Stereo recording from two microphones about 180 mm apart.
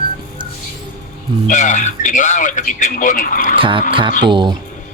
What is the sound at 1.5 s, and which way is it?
A man's voice, 45° left (ahead or behind).